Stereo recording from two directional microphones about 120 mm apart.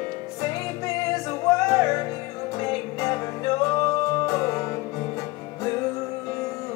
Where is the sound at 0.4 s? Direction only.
25° left (ahead or behind).